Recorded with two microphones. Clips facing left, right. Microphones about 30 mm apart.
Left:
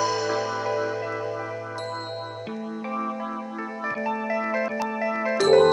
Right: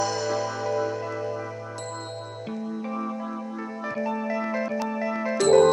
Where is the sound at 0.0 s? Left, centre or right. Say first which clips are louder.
Left 2 dB; centre.